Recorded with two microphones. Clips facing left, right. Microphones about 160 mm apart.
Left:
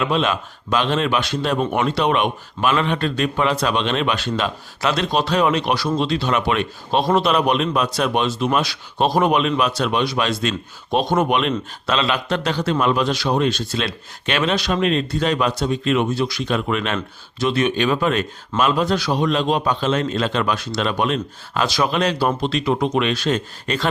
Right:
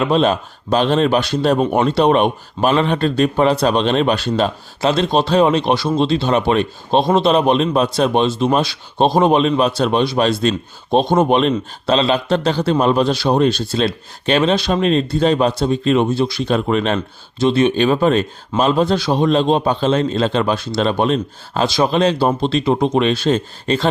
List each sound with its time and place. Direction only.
0.0 s speech: 35° right (ahead or behind)